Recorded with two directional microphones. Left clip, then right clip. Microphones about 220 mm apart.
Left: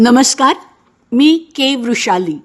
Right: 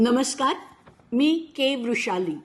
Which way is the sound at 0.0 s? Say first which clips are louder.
Left 12 dB; 45° left (ahead or behind).